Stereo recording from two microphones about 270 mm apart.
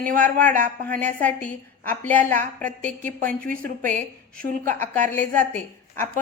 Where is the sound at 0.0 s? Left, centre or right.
Right.